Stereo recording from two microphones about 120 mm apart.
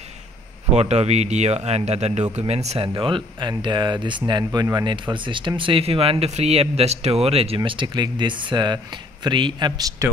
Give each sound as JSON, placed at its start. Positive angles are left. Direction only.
{"t": 0.7, "sound": "speech", "side_deg": -65}
{"t": 2.9, "sound": "speech", "side_deg": -45}